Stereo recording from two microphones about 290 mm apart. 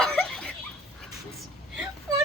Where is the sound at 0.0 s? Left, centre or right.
Centre.